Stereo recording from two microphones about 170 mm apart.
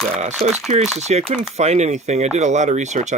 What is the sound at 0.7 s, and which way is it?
Speech, 40° right (ahead or behind).